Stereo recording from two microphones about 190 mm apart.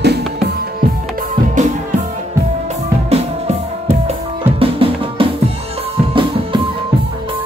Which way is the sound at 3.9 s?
35° right (ahead or behind).